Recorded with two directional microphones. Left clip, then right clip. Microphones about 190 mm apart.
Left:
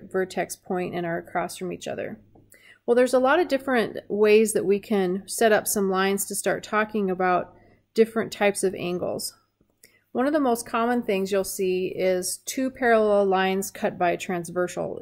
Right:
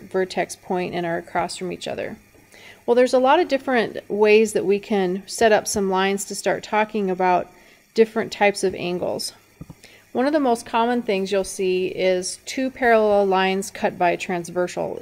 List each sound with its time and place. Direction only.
0.1 s a woman's voice: 15° right (ahead or behind)